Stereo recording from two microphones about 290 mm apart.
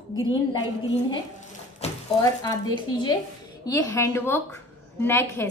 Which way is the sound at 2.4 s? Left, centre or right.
Centre.